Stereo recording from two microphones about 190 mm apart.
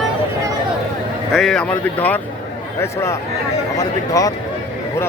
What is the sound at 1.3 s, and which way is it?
A man's voice, centre (ahead or behind).